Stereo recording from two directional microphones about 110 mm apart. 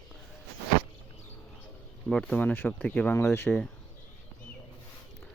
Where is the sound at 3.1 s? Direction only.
25° left (ahead or behind).